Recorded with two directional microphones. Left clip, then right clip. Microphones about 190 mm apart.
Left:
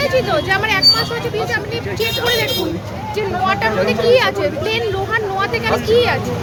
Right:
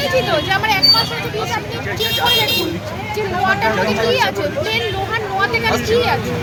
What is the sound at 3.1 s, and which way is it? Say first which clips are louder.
Speech: even; 30° left (ahead or behind).